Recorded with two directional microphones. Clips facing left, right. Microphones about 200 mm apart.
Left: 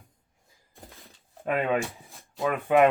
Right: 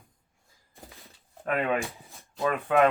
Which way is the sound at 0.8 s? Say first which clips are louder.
Even; centre (ahead or behind).